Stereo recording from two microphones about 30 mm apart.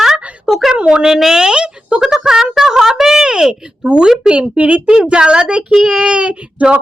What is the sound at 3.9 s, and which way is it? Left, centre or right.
Child singing, right.